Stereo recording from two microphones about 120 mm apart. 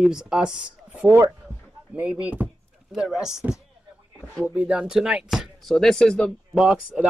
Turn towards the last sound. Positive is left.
turn(degrees=-5)  # may be behind; listen again after turning